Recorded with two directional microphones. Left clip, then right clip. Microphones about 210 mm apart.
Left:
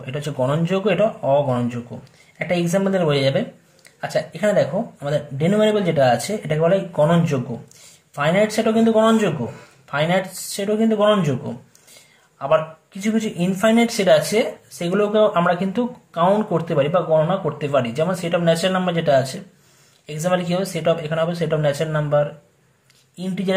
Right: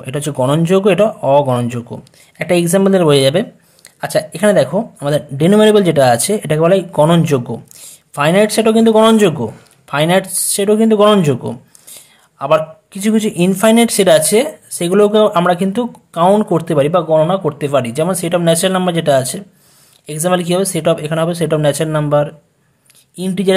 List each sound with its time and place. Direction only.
0.0 s speech: 40° right (ahead or behind)